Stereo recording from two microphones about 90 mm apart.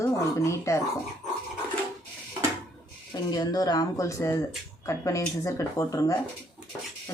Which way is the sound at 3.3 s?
45° left (ahead or behind).